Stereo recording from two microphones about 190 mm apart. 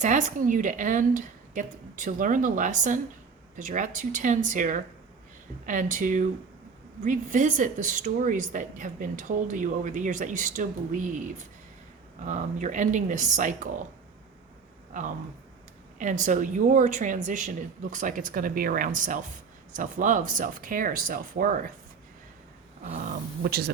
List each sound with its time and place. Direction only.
0.0 s a woman's voice: 40° right (ahead or behind)
14.9 s a woman's voice: 45° right (ahead or behind)
22.8 s speech: 40° right (ahead or behind)
23.4 s speech: 55° right (ahead or behind)